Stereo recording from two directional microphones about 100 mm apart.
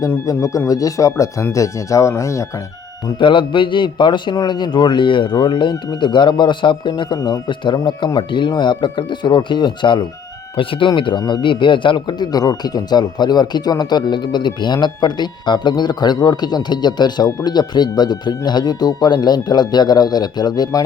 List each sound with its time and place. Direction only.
0.3 s speech: 35° left (ahead or behind)
3.2 s speech: 55° left (ahead or behind); by 20.8 s 40° left (ahead or behind)